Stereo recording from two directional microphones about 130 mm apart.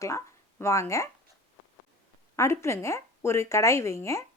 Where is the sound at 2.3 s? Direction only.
20° left (ahead or behind).